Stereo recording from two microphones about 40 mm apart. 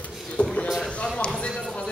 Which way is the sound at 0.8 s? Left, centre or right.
Left.